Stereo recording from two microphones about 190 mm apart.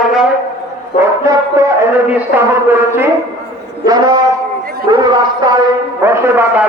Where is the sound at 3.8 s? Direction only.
20° right (ahead or behind).